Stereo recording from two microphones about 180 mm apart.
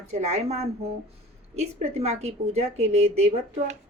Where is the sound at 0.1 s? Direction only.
35° right (ahead or behind).